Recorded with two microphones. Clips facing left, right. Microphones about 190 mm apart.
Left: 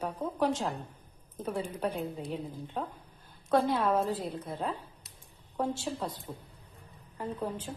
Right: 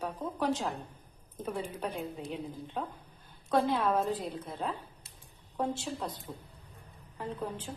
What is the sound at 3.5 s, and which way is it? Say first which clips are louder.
Speech: left 1 dB; centre (ahead or behind).